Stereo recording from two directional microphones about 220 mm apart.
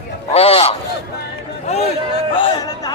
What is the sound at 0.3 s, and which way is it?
Speech, 25° left (ahead or behind).